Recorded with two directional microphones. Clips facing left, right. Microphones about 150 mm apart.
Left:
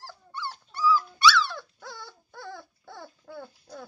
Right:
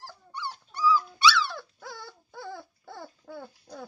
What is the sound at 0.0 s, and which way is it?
Dog, 15° right (ahead or behind).